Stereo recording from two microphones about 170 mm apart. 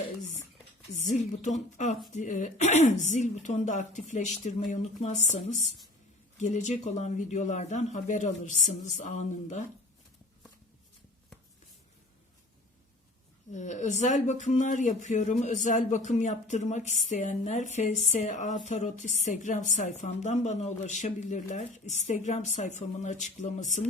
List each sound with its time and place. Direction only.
0.9 s speech: 45° left (ahead or behind)
13.5 s speech: 45° left (ahead or behind)